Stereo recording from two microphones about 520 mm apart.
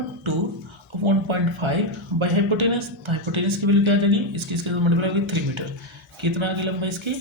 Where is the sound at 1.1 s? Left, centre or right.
Right.